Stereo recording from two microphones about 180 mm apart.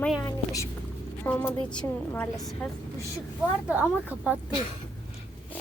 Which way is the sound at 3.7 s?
10° right (ahead or behind).